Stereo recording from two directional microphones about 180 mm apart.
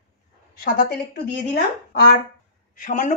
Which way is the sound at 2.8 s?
45° left (ahead or behind).